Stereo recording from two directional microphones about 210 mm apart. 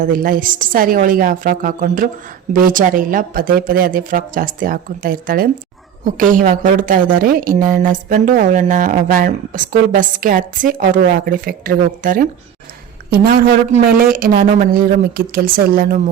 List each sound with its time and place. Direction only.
0.0 s a woman's voice: 40° right (ahead or behind)